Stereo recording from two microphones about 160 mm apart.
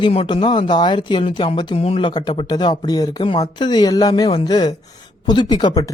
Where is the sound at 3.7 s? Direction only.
25° left (ahead or behind).